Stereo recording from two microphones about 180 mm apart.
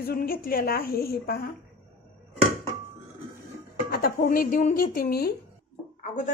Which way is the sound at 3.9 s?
55° left (ahead or behind).